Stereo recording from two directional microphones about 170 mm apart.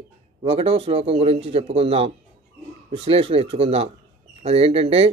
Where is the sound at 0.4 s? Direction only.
35° right (ahead or behind).